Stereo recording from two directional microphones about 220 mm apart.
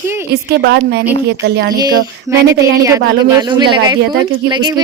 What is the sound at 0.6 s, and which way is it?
Speech, 50° right (ahead or behind).